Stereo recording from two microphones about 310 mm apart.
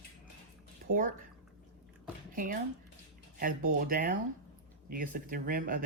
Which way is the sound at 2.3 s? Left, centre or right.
Right.